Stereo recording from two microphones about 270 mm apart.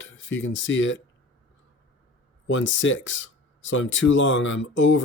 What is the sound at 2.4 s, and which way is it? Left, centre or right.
Speech, left.